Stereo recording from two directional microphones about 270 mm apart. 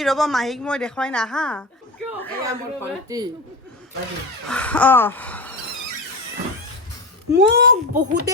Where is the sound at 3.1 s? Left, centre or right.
Centre.